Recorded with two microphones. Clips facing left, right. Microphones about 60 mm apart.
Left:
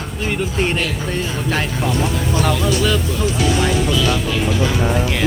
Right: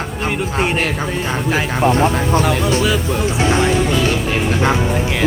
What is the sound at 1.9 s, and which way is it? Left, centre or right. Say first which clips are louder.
Speech: right 7 dB; right.